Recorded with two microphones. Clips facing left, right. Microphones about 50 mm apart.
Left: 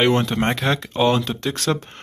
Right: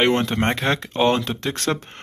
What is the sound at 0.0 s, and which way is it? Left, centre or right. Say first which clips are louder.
Speech: left 1 dB; right.